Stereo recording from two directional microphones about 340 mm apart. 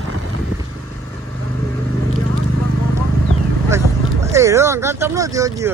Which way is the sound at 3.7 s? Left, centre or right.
Centre.